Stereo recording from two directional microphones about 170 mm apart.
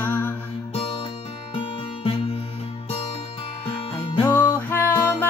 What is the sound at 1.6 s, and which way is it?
Music, 30° left (ahead or behind).